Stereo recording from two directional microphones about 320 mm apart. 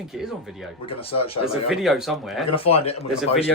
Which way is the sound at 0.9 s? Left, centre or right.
Centre.